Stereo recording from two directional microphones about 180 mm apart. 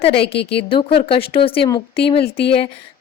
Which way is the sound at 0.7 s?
30° left (ahead or behind).